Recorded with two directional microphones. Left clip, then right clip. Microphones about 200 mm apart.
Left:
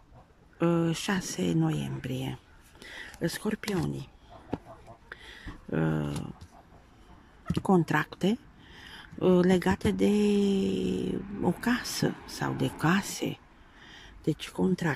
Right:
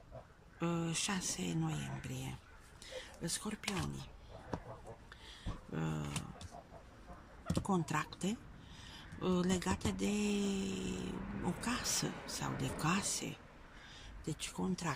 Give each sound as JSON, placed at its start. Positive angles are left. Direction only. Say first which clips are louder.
{"t": 0.6, "sound": "speech", "louder": "left 11 dB", "side_deg": 40}
{"t": 5.1, "sound": "a sound", "louder": "left 11 dB", "side_deg": 40}
{"t": 7.5, "sound": "speech", "louder": "left 11 dB", "side_deg": 40}